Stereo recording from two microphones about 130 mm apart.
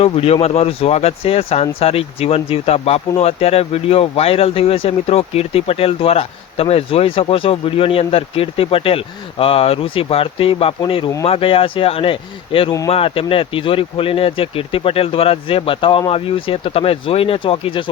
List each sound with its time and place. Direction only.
0.0 s speech: 50° left (ahead or behind)